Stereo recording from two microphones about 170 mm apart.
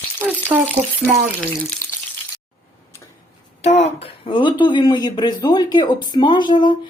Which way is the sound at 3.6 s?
40° left (ahead or behind).